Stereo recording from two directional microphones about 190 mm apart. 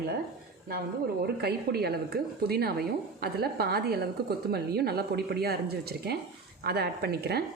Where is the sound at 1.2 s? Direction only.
55° right (ahead or behind).